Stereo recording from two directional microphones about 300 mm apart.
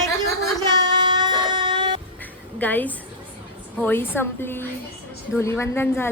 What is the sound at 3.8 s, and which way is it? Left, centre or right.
A woman's voice, centre.